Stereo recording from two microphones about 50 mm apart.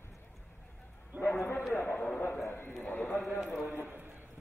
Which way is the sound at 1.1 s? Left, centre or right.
Right.